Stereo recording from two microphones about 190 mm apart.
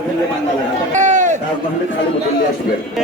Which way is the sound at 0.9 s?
40° right (ahead or behind).